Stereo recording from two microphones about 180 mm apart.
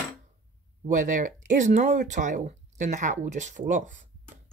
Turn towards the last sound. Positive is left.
turn(degrees=-45)  # may be behind; listen again after turning